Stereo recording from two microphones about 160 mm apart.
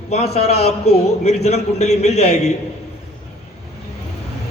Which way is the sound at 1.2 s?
40° left (ahead or behind).